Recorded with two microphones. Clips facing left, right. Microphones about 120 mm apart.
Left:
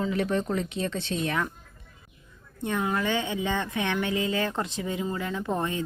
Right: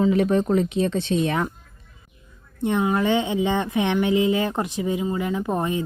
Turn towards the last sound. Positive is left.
turn(degrees=-15)  # may be behind; listen again after turning